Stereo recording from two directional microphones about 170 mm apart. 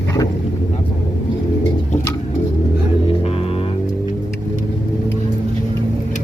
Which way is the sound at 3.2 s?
35° left (ahead or behind).